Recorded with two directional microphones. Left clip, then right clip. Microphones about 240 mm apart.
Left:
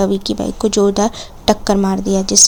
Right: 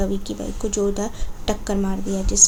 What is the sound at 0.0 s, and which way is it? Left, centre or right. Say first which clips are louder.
Speech: left 9 dB; left.